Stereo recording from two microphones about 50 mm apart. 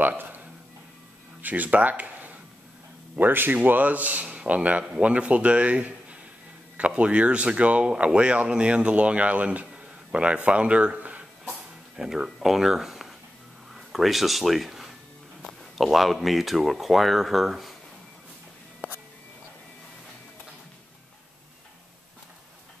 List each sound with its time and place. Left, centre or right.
0.0 s music: right
1.4 s a man's voice: right
12.0 s speech: centre